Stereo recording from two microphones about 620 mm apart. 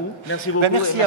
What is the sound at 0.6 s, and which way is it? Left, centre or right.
Speech, right.